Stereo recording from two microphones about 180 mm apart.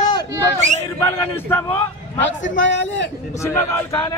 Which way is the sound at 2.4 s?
90° left.